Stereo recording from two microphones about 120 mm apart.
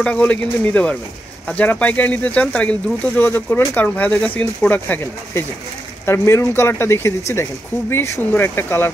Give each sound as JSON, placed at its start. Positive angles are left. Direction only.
{"t": 0.0, "sound": "speech", "side_deg": 10}